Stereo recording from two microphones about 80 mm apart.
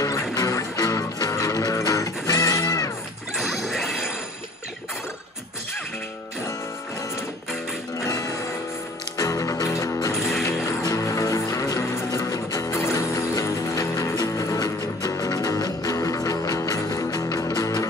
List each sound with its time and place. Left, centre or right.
0.0 s music: left
3.3 s smash: centre
8.0 s music: left
10.1 s music: centre
10.4 s music: left
12.7 s music: left